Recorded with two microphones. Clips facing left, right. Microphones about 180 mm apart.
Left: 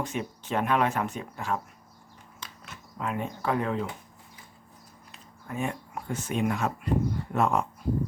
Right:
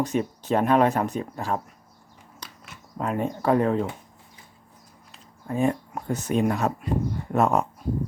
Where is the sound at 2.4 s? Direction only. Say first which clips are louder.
Right 1 dB; 40° right (ahead or behind).